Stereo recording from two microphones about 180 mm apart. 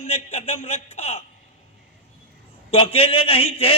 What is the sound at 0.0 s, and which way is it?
A man's voice, 35° left (ahead or behind).